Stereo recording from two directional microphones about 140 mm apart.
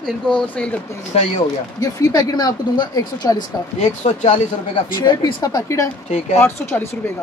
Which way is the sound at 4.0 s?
60° left (ahead or behind).